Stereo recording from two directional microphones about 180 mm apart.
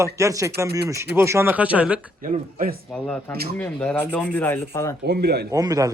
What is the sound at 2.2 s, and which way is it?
Speech, 50° right (ahead or behind).